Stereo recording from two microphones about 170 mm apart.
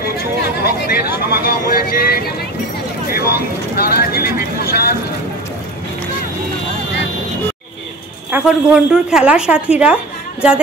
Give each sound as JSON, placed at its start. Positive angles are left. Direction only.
{"t": 0.4, "sound": "speech", "side_deg": 65}
{"t": 8.3, "sound": "a woman's voice", "side_deg": -5}